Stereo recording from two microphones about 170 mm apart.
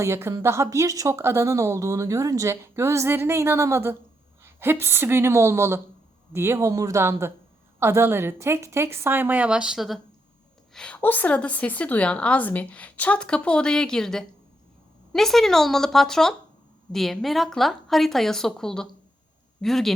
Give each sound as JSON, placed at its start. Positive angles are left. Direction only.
{"t": 0.0, "sound": "a woman's voice", "side_deg": -15}